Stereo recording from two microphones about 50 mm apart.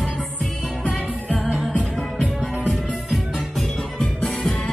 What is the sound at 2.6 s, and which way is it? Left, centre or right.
Music, centre.